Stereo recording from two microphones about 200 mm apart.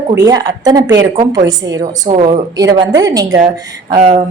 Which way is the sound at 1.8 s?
30° right (ahead or behind).